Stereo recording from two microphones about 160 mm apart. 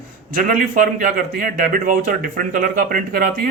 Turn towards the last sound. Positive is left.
turn(degrees=-60)  # may be behind; listen again after turning